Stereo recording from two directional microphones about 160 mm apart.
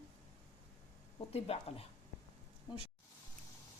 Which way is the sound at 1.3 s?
40° left (ahead or behind).